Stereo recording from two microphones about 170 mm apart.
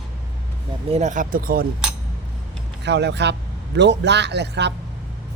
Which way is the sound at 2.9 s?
90° right.